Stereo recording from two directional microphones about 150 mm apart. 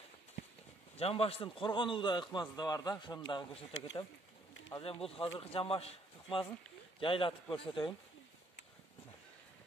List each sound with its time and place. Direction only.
0.9 s a man's voice: 40° left (ahead or behind)